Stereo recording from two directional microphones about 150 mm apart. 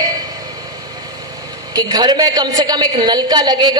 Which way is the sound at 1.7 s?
30° right (ahead or behind).